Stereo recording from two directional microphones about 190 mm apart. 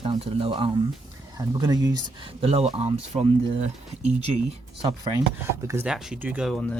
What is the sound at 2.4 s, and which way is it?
Speech, 30° right (ahead or behind).